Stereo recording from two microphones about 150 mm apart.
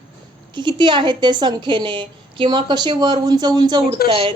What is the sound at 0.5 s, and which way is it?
Speech, 30° right (ahead or behind).